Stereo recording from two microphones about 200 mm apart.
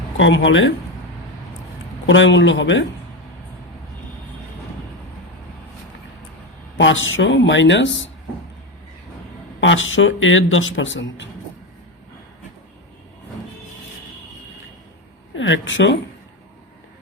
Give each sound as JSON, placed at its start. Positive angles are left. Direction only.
{"t": 0.2, "sound": "speech", "side_deg": 70}
{"t": 2.0, "sound": "speech", "side_deg": 70}
{"t": 6.7, "sound": "speech", "side_deg": 70}
{"t": 9.6, "sound": "speech", "side_deg": 75}
{"t": 15.4, "sound": "speech", "side_deg": 70}